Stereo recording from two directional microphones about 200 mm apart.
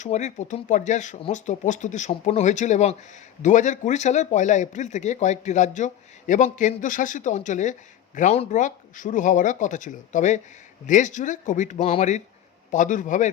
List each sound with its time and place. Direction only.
0.0 s a man's voice: 35° left (ahead or behind)